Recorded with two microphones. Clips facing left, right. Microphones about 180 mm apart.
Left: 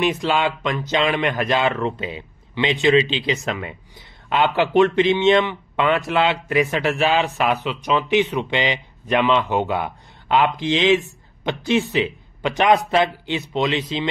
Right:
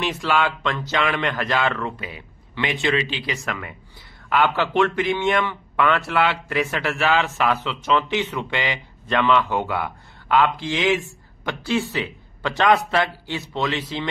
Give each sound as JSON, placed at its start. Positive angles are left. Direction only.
{"t": 0.0, "sound": "speech", "side_deg": 20}